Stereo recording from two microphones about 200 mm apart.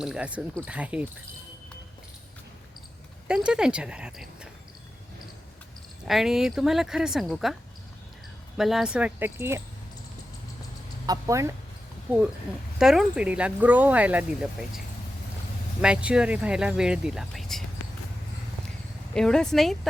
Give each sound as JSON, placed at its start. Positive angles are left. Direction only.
{"t": 0.0, "sound": "speech", "side_deg": -5}
{"t": 3.2, "sound": "speech", "side_deg": -5}
{"t": 6.1, "sound": "speech", "side_deg": 0}
{"t": 8.5, "sound": "speech", "side_deg": 0}
{"t": 11.0, "sound": "speech", "side_deg": -15}
{"t": 12.8, "sound": "speech", "side_deg": 0}
{"t": 15.8, "sound": "speech", "side_deg": -5}
{"t": 19.1, "sound": "speech", "side_deg": 5}